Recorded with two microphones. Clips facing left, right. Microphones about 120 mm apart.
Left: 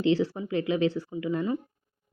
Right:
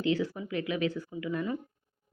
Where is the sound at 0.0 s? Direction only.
30° left (ahead or behind).